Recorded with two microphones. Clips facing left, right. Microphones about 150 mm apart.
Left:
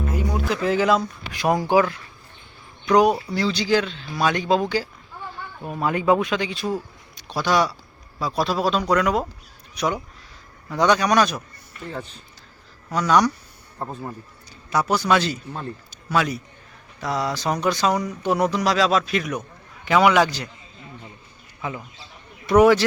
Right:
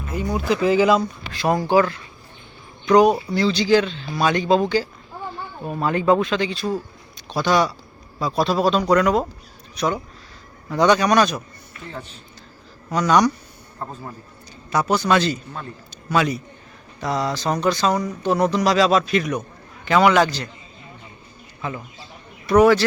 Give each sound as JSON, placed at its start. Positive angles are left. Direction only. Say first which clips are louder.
{"t": 0.1, "sound": "speech", "louder": "right 6 dB", "side_deg": 0}
{"t": 1.3, "sound": "speech", "louder": "right 1 dB", "side_deg": 15}
{"t": 10.7, "sound": "speech", "louder": "right 2 dB", "side_deg": -5}
{"t": 12.9, "sound": "speech", "louder": "right 2 dB", "side_deg": 5}
{"t": 14.7, "sound": "speech", "louder": "right 1 dB", "side_deg": 10}
{"t": 21.6, "sound": "speech", "louder": "right 1 dB", "side_deg": 10}